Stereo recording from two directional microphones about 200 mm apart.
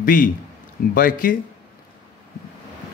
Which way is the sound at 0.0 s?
45° left (ahead or behind).